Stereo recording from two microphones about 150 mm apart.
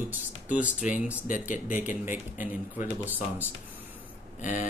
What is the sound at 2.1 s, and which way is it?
Speech, 10° right (ahead or behind).